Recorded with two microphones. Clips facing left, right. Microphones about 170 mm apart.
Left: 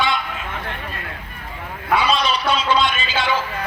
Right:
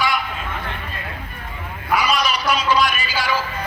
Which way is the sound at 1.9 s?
25° left (ahead or behind).